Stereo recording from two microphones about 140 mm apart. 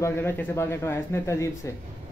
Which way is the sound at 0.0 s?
15° left (ahead or behind).